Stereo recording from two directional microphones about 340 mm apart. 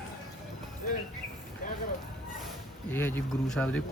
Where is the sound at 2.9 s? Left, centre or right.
Centre.